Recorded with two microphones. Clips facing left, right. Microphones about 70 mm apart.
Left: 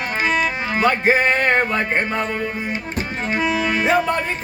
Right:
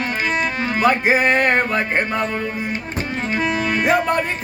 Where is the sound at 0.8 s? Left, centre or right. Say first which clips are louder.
Even; centre.